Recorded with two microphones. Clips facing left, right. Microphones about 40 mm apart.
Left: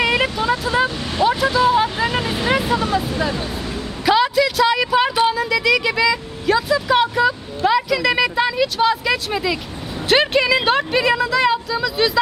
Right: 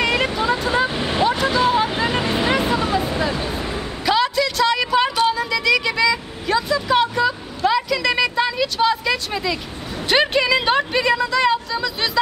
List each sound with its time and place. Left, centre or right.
0.0 s vehicle: centre
0.8 s vehicle: right
1.2 s vehicle: centre
3.2 s speech: centre
4.0 s a sound: centre
5.3 s vehicle: centre
10.0 s a sound: centre